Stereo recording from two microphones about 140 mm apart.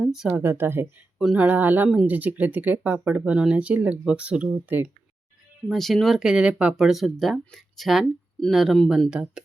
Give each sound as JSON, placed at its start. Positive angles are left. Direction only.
{"t": 0.0, "sound": "speech", "side_deg": -5}
{"t": 0.3, "sound": "speech", "side_deg": -15}
{"t": 5.6, "sound": "speech", "side_deg": 0}